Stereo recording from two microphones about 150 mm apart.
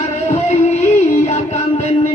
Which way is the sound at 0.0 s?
50° left (ahead or behind).